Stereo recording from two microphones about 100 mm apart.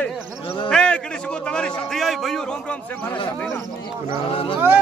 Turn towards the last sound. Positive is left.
turn(degrees=65)  # may be behind; listen again after turning